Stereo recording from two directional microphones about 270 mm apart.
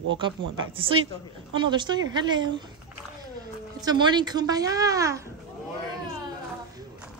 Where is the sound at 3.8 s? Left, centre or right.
Centre.